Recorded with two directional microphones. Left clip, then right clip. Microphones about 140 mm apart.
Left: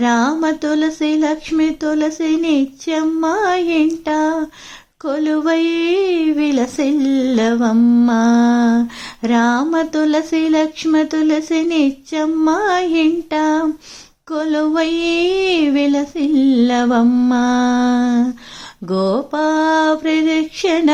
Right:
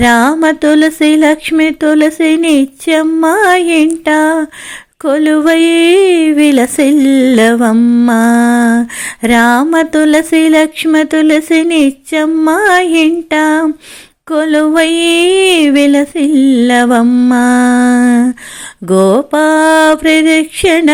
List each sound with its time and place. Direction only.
0.0 s speech: 25° right (ahead or behind)
7.8 s mantra: 10° right (ahead or behind)
8.0 s speech: 20° right (ahead or behind)
17.7 s humming: 40° right (ahead or behind)
18.0 s speech: 25° right (ahead or behind)